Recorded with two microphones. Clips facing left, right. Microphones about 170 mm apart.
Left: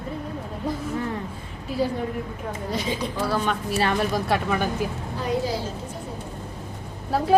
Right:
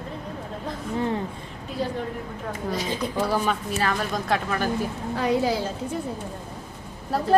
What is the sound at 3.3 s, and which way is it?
Speech, 10° right (ahead or behind).